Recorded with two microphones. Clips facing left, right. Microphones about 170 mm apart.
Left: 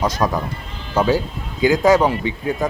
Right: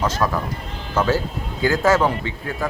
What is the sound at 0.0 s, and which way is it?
A man's voice, 15° left (ahead or behind).